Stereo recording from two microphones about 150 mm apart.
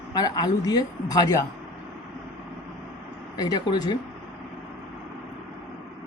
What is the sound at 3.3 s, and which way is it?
Speech, 25° left (ahead or behind).